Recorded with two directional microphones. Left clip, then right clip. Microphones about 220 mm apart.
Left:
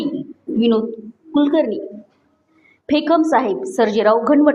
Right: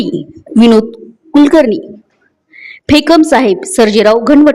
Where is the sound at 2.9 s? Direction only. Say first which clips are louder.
Right 8 dB; 50° right (ahead or behind).